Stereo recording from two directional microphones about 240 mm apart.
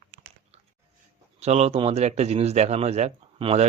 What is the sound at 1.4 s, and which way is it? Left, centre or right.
A man's voice, right.